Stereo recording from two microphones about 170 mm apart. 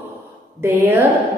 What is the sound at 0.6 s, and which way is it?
Speech, 10° right (ahead or behind).